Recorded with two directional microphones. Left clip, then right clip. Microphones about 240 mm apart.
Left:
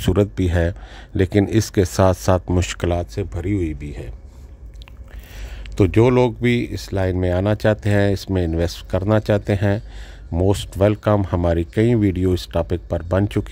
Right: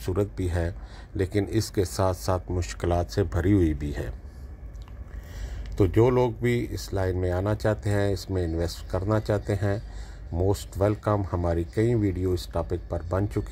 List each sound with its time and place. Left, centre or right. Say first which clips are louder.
0.5 s speech: left 10 dB; left
2.8 s speech: even; left
3.2 s speech: even; centre
5.8 s speech: left 6 dB; left